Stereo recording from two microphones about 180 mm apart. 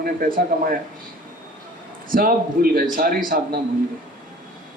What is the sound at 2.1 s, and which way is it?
Speech, 50° right (ahead or behind).